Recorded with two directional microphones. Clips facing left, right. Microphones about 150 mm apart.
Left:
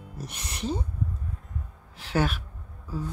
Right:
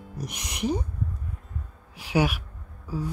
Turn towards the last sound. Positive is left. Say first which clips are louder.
# right 3 dB
turn(degrees=-10)  # may be behind; listen again after turning